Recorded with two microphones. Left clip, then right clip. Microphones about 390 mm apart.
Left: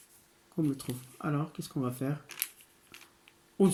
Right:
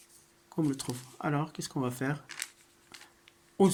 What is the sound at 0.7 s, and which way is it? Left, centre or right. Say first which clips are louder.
Speech: right 2 dB; right.